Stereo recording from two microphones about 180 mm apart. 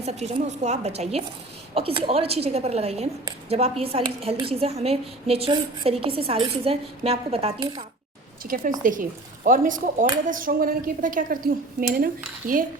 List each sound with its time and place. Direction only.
0.0 s a woman's voice: 35° right (ahead or behind)
8.4 s speech: 50° right (ahead or behind)